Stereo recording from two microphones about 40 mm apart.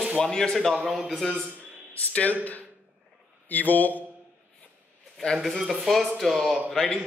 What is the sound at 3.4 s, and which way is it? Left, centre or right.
Speech, left.